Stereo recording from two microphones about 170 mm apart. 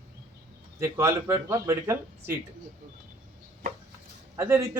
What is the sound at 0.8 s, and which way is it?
Speech, 15° right (ahead or behind).